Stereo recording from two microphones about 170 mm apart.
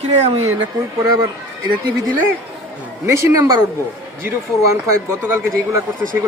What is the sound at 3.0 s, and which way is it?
Speech, 15° right (ahead or behind).